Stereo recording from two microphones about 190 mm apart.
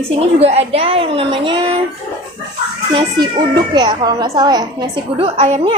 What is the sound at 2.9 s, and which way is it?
A woman's voice, 25° right (ahead or behind).